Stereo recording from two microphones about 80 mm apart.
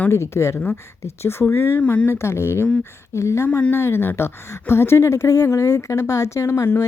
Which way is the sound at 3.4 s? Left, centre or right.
Left.